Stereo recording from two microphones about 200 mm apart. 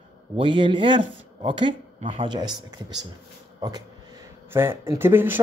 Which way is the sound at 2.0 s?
35° right (ahead or behind).